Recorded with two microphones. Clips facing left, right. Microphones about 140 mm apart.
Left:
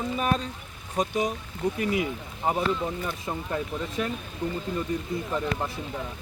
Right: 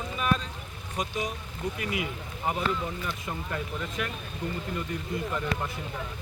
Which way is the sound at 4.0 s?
30° left (ahead or behind).